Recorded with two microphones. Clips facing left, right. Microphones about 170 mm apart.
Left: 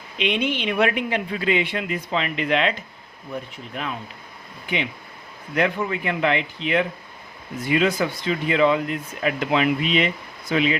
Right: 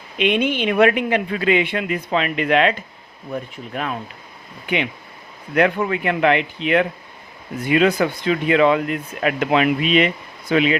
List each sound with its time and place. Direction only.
0.2 s speech: 55° right (ahead or behind)
5.5 s speech: 60° right (ahead or behind)